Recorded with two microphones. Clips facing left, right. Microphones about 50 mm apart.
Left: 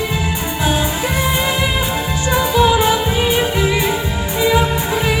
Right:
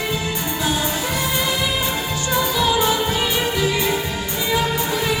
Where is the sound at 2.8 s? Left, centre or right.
Left.